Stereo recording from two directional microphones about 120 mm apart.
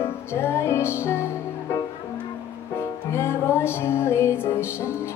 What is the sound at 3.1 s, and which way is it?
Music, 20° left (ahead or behind).